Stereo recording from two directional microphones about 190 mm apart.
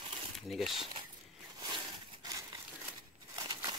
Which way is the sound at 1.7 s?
20° right (ahead or behind).